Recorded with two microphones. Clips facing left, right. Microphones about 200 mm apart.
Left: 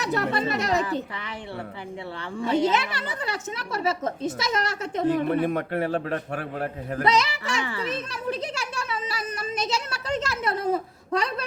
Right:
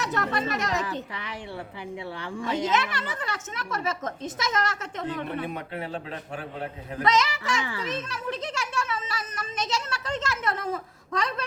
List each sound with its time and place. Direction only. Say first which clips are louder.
0.0 s speech: left 3 dB; 35° left (ahead or behind)
2.6 s speech: left 3 dB; 30° left (ahead or behind)
5.3 s a man's voice: left 8 dB; 50° left (ahead or behind)
7.0 s a child's voice: left 1 dB; 30° left (ahead or behind)